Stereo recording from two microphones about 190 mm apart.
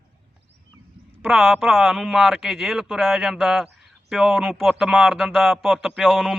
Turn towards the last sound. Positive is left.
turn(degrees=0)  # may be behind; listen again after turning